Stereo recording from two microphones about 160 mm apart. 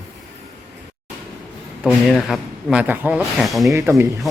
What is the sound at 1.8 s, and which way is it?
Speech, centre (ahead or behind).